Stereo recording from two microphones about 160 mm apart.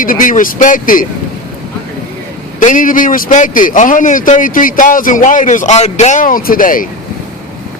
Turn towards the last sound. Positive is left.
turn(degrees=60)  # may be behind; listen again after turning